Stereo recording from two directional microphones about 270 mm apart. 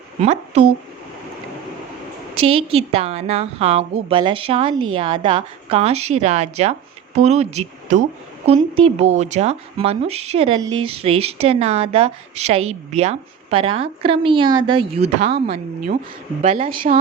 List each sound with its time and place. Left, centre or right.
0.2 s speech: right
2.3 s speech: right